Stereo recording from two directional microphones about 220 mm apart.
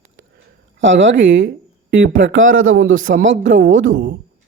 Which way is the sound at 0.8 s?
55° right (ahead or behind).